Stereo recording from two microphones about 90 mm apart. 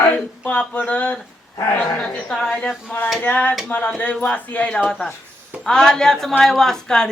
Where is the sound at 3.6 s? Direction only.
15° left (ahead or behind).